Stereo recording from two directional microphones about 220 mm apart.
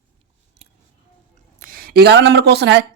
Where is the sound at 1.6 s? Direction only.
40° right (ahead or behind).